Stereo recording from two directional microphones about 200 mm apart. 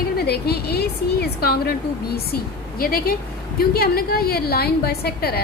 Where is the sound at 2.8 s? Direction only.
50° left (ahead or behind).